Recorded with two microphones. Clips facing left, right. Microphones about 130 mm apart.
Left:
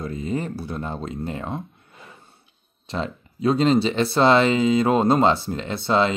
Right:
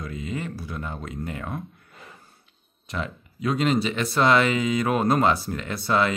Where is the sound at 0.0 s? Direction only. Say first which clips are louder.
Left 5 dB; 35° left (ahead or behind).